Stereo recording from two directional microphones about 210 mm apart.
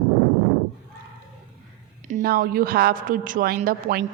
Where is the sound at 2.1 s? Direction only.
40° right (ahead or behind).